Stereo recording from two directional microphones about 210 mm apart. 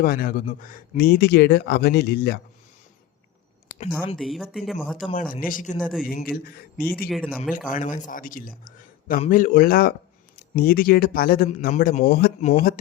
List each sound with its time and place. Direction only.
0.0 s speech: 45° left (ahead or behind)
4.2 s speech: centre (ahead or behind)
5.3 s a man's voice: 40° left (ahead or behind)
5.8 s speech: centre (ahead or behind)
6.1 s speech: 45° left (ahead or behind)
7.1 s speech: 5° left (ahead or behind)
7.7 s a man's voice: 40° left (ahead or behind)